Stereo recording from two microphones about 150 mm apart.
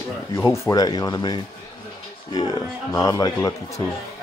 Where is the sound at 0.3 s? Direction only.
20° left (ahead or behind).